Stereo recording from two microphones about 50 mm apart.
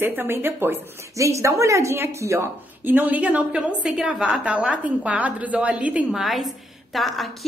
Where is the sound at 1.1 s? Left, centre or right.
Right.